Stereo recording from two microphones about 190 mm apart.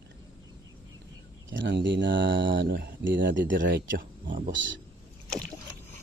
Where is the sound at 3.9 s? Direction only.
45° right (ahead or behind).